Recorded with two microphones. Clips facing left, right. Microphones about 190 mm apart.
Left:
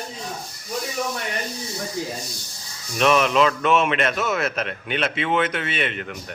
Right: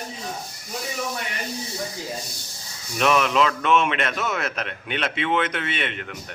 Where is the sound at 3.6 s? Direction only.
40° left (ahead or behind).